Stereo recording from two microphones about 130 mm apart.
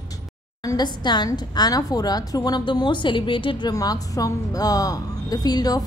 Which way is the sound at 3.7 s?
30° left (ahead or behind).